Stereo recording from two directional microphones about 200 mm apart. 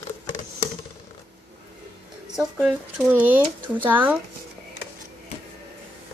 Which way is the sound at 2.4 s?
5° right (ahead or behind).